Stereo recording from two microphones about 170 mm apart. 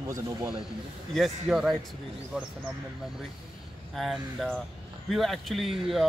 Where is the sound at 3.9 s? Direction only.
Centre (ahead or behind).